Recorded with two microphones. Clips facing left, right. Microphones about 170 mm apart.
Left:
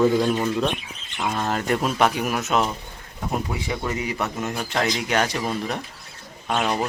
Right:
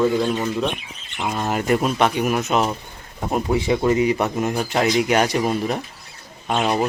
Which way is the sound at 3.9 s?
25° right (ahead or behind).